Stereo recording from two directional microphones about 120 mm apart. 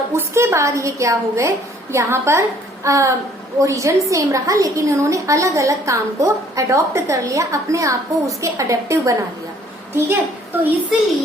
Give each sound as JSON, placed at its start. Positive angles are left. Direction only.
{"t": 0.1, "sound": "a woman's voice", "side_deg": -20}
{"t": 10.9, "sound": "a child's voice", "side_deg": -5}